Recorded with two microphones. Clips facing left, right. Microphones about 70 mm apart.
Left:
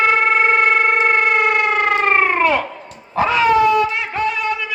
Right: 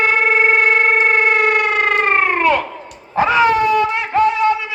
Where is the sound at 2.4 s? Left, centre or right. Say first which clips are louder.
Right 1 dB; centre.